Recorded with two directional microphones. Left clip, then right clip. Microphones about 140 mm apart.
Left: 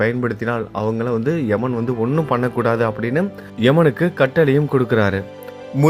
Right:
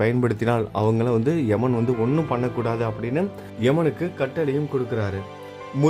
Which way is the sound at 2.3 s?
15° left (ahead or behind).